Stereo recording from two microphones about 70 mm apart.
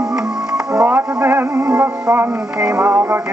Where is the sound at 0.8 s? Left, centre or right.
Right.